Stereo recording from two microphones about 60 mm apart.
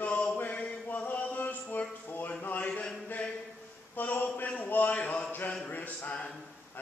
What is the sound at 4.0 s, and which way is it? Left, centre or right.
A man's voice, left.